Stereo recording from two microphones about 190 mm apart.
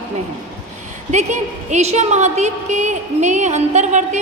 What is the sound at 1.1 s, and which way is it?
A woman's voice, 35° right (ahead or behind).